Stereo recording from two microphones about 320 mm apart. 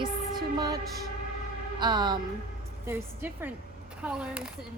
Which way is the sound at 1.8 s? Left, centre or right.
Centre.